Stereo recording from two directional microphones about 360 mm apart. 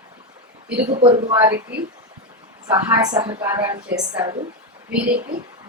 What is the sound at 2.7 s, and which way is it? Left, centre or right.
Speech, centre.